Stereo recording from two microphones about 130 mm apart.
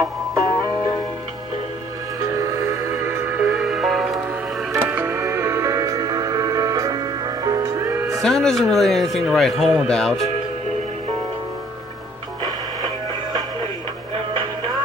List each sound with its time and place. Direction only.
0.0 s music: 25° right (ahead or behind)
3.1 s music: 15° right (ahead or behind); by 4.2 s centre (ahead or behind)
4.8 s music: 15° right (ahead or behind)
8.2 s speech: 5° left (ahead or behind)
12.4 s music: 30° right (ahead or behind)